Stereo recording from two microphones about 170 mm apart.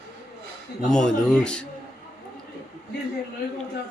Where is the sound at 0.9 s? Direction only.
5° left (ahead or behind).